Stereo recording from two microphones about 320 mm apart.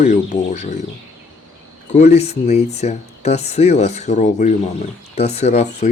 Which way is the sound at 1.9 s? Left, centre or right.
Centre.